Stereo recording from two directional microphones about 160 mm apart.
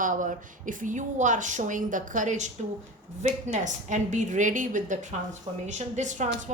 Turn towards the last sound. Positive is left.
turn(degrees=-50)  # may be behind; listen again after turning